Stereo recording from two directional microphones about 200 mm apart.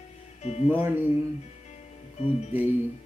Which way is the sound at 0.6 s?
10° right (ahead or behind).